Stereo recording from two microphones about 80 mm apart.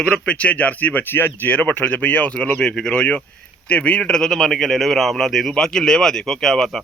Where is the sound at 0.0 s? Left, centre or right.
Centre.